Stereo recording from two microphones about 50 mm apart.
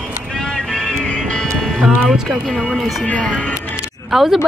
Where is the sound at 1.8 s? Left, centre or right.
Centre.